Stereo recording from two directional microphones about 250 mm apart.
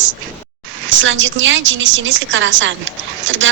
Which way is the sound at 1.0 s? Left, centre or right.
Right.